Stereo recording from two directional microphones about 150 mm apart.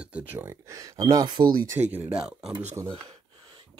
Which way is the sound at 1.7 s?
15° right (ahead or behind).